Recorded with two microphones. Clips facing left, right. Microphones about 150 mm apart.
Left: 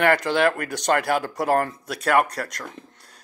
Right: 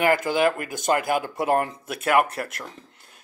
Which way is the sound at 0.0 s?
5° right (ahead or behind).